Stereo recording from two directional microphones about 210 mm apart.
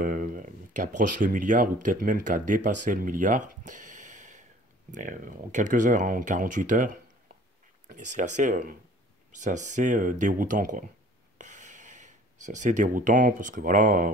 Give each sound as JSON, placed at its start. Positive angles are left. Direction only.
{"t": 0.0, "sound": "speech", "side_deg": -40}